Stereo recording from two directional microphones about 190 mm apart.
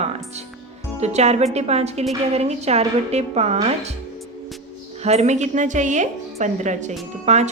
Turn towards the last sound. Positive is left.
turn(degrees=-35)  # may be behind; listen again after turning